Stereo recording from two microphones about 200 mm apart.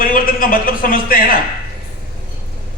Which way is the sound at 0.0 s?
45° left (ahead or behind).